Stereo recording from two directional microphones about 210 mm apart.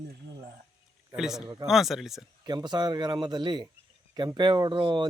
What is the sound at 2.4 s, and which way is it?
Speech, 20° right (ahead or behind).